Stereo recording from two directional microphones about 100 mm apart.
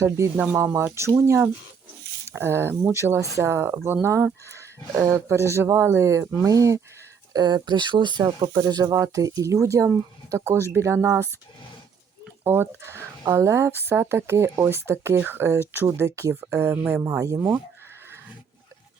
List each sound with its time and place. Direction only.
0.0 s speech: 20° right (ahead or behind)
2.3 s speech: 25° right (ahead or behind)
7.3 s speech: 45° right (ahead or behind)
8.5 s speech: 35° right (ahead or behind)
12.5 s speech: 25° right (ahead or behind)